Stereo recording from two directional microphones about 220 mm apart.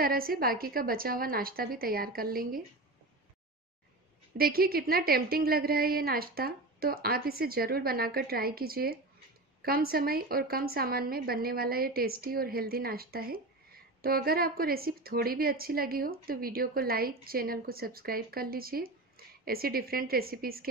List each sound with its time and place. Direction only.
0.0 s a woman's voice: 40° right (ahead or behind)
4.4 s a woman's voice: 45° right (ahead or behind)